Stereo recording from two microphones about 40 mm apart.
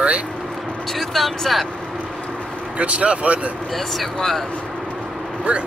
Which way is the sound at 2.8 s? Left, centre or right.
Right.